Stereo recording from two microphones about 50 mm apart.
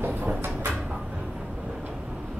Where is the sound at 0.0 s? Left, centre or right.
Right.